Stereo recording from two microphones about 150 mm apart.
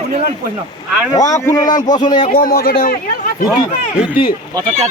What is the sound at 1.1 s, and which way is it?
A man's voice, 25° left (ahead or behind).